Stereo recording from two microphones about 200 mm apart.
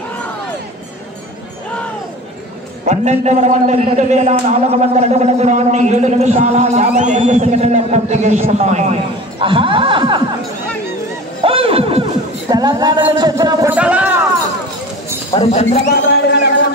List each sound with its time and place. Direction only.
2.9 s a man's voice: 35° right (ahead or behind)
11.4 s a sound: 30° right (ahead or behind)
13.1 s speech: 20° right (ahead or behind)
15.3 s speech: 30° left (ahead or behind)
15.9 s speech: 55° left (ahead or behind)